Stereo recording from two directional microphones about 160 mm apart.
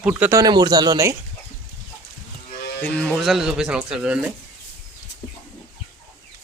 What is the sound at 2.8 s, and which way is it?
Speech, 10° left (ahead or behind).